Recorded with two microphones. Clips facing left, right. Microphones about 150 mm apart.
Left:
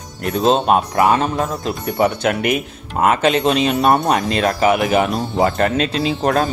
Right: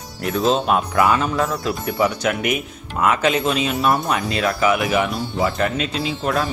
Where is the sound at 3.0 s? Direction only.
50° left (ahead or behind).